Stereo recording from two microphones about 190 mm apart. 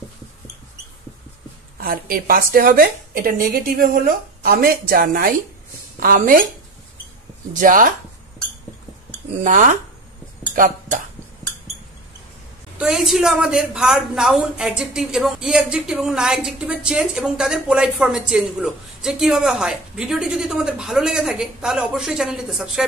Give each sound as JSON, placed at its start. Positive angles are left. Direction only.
{"t": 1.8, "sound": "a woman's voice", "side_deg": -50}
{"t": 7.5, "sound": "a woman's voice", "side_deg": -45}
{"t": 9.4, "sound": "a woman's voice", "side_deg": -40}
{"t": 12.7, "sound": "a woman's voice", "side_deg": -5}